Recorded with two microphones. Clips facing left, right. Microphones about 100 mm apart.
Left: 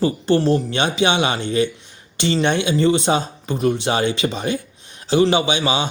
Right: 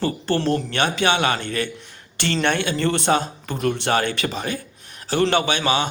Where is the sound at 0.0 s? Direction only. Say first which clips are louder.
Left 5 dB; 15° left (ahead or behind).